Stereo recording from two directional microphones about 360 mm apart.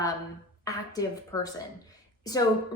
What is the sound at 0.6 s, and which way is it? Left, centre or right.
A woman's voice, centre.